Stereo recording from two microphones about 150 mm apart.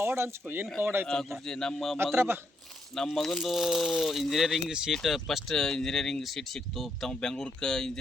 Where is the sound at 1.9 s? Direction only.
15° right (ahead or behind).